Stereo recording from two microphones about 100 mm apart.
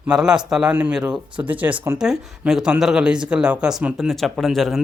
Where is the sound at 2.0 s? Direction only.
5° right (ahead or behind).